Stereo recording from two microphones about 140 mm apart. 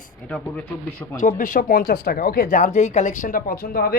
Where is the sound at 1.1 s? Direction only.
65° left (ahead or behind).